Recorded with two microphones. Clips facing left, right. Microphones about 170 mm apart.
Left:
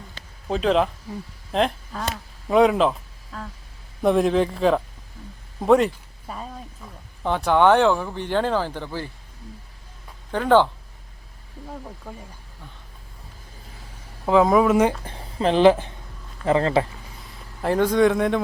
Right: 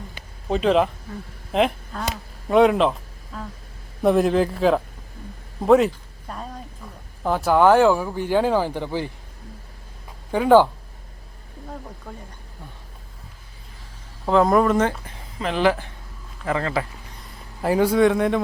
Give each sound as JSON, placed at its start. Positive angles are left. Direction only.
{"t": 0.4, "sound": "a man's voice", "side_deg": 0}
{"t": 5.6, "sound": "a sound", "side_deg": 0}
{"t": 7.2, "sound": "speech", "side_deg": -5}
{"t": 10.3, "sound": "speech", "side_deg": -10}
{"t": 12.1, "sound": "speech", "side_deg": 5}
{"t": 14.3, "sound": "a man's voice", "side_deg": 0}
{"t": 15.0, "sound": "speech", "side_deg": 30}
{"t": 17.2, "sound": "speech", "side_deg": -5}